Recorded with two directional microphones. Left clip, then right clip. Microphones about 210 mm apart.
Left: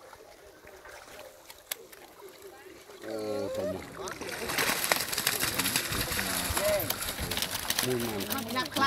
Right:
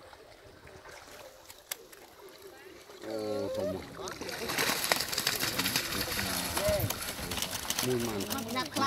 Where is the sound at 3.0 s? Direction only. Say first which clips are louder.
Left 1 dB; centre (ahead or behind).